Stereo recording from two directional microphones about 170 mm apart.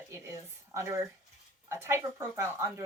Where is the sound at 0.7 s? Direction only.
15° right (ahead or behind).